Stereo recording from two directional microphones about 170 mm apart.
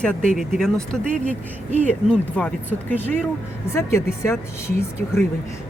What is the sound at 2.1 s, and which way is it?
Speech, 10° left (ahead or behind).